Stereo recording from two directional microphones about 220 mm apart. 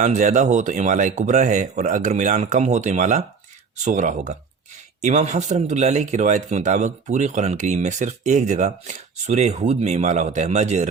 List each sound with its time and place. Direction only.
0.0 s speech: 35° right (ahead or behind)